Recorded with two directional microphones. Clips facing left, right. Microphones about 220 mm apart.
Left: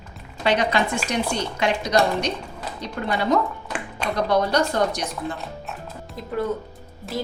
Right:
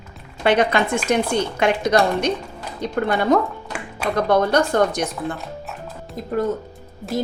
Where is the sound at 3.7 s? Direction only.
5° right (ahead or behind).